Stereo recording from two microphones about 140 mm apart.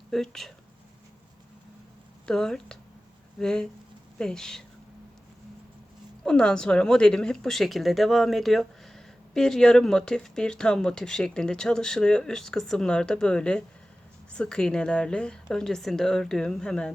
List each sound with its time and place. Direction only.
0.1 s speech: centre (ahead or behind)
2.2 s speech: 5° left (ahead or behind)
6.2 s speech: 5° left (ahead or behind)